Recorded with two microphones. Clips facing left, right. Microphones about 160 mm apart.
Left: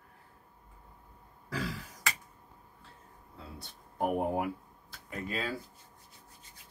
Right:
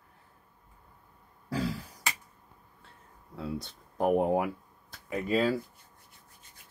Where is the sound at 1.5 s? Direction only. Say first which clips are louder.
Right 5 dB; 40° right (ahead or behind).